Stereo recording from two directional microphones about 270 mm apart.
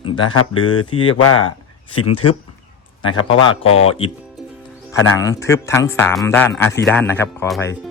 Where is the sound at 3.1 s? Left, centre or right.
Left.